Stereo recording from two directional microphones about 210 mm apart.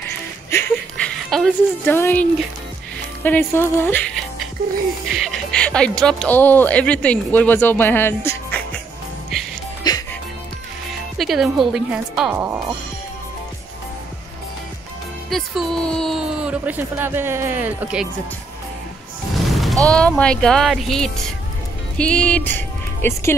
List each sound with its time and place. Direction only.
0.5 s a sound: 10° left (ahead or behind)
2.0 s speech: 10° left (ahead or behind)
3.3 s speech: 10° left (ahead or behind)
5.1 s speech: centre (ahead or behind)
9.8 s music: 20° left (ahead or behind)
11.1 s a woman's voice: centre (ahead or behind)
15.2 s a woman's voice: centre (ahead or behind)
19.3 s music: centre (ahead or behind)
19.9 s a woman's voice: 5° left (ahead or behind)